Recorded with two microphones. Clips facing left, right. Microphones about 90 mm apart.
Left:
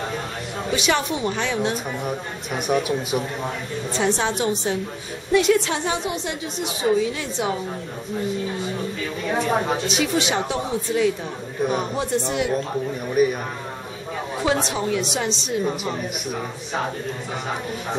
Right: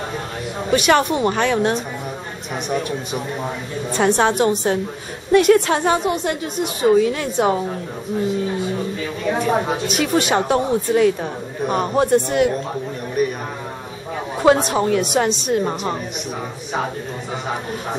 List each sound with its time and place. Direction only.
0.7 s a woman's voice: 55° right (ahead or behind)
2.5 s a man's voice: 5° left (ahead or behind)
3.9 s a woman's voice: 55° right (ahead or behind)
9.8 s a woman's voice: 50° right (ahead or behind)
13.1 s a man's voice: 5° left (ahead or behind)
14.4 s a woman's voice: 50° right (ahead or behind)